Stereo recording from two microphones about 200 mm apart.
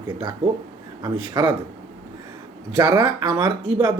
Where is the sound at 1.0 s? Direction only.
20° right (ahead or behind).